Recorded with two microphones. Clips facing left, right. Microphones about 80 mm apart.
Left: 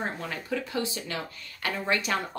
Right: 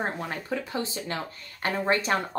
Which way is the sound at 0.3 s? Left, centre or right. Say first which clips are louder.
Right 1 dB; right.